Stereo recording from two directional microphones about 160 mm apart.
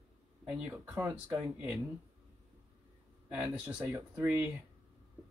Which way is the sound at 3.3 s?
5° right (ahead or behind).